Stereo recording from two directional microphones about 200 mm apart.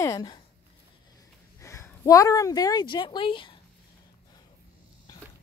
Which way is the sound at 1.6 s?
15° left (ahead or behind).